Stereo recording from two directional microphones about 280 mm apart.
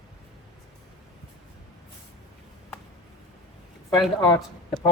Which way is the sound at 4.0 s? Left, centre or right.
Centre.